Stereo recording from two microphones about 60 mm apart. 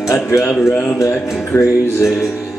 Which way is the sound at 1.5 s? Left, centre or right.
Left.